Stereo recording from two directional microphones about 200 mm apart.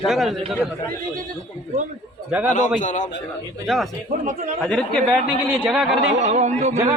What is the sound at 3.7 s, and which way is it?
A man's voice, centre (ahead or behind).